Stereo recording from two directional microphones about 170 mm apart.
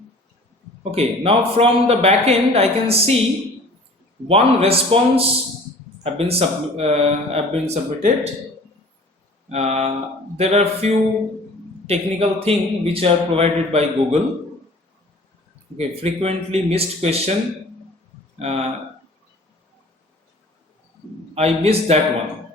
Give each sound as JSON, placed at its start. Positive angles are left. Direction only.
{"t": 0.9, "sound": "speech", "side_deg": -35}
{"t": 4.3, "sound": "speech", "side_deg": -35}
{"t": 9.5, "sound": "speech", "side_deg": -40}
{"t": 15.8, "sound": "speech", "side_deg": -40}
{"t": 18.3, "sound": "speech", "side_deg": -40}
{"t": 21.3, "sound": "speech", "side_deg": -40}